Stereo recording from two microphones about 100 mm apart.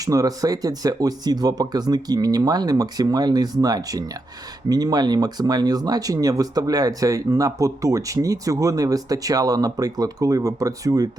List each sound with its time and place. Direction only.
0.0 s speech: 35° right (ahead or behind)